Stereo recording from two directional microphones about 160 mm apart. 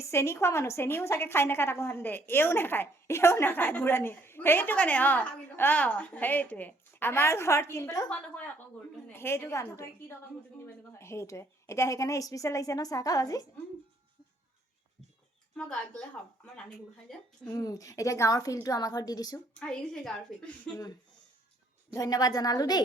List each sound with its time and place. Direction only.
0.0 s a woman's voice: 15° left (ahead or behind)
9.1 s a woman's voice: 15° left (ahead or behind)
17.4 s a woman's voice: 25° left (ahead or behind)
19.5 s a woman's voice: 5° left (ahead or behind)
21.9 s a woman's voice: 20° left (ahead or behind)